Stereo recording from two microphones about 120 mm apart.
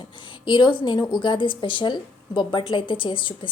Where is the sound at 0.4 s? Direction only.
40° left (ahead or behind).